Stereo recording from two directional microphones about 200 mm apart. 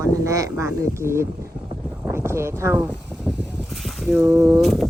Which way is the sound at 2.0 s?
15° right (ahead or behind).